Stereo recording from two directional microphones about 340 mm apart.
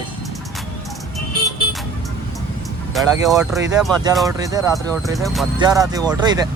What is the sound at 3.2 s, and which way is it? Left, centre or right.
Speech, centre.